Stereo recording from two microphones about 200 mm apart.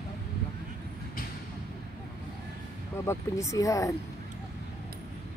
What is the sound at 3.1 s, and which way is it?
Speech, 15° left (ahead or behind).